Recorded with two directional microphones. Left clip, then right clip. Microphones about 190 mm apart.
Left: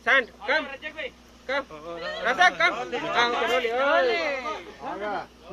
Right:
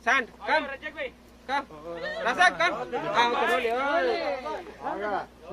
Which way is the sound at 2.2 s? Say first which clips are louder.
Left 2 dB; 65° right (ahead or behind).